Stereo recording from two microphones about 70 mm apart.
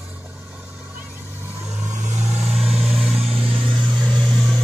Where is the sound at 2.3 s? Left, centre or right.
Centre.